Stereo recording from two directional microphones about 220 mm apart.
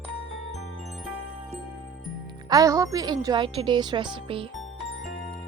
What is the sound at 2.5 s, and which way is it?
Speech, 15° right (ahead or behind).